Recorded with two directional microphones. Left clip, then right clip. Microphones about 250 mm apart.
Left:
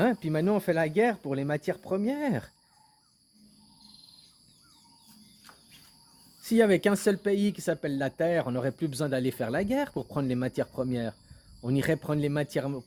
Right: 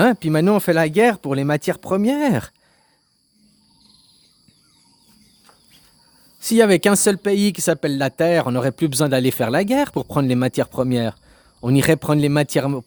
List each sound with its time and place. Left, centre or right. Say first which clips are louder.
0.0 s speech: right 10 dB; right
6.4 s speech: right 9 dB; right